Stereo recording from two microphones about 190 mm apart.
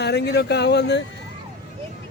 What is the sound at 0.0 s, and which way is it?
Speech, 60° left (ahead or behind).